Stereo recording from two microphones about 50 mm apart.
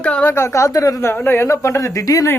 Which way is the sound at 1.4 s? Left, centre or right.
Left.